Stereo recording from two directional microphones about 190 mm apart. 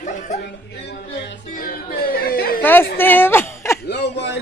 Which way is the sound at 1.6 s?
50° left (ahead or behind).